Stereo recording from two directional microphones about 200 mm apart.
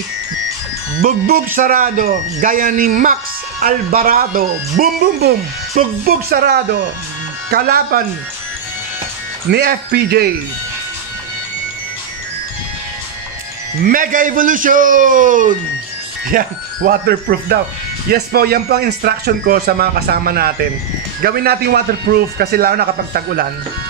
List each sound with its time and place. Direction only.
1.0 s speech: 45° right (ahead or behind)
9.5 s speech: 55° right (ahead or behind)
13.8 s a man's voice: 40° right (ahead or behind)